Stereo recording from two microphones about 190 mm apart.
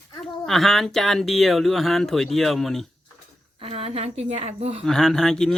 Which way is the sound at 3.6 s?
30° right (ahead or behind).